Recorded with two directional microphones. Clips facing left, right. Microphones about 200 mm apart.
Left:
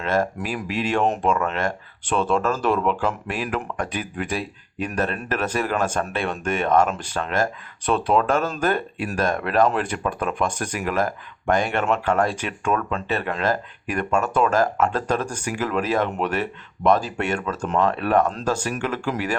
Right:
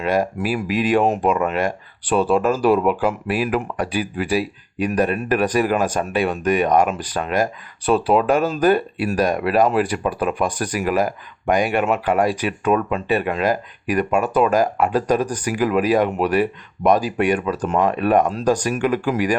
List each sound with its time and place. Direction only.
0.0 s speech: 10° right (ahead or behind)
7.9 s speech: 35° right (ahead or behind)
8.1 s speech: 10° right (ahead or behind)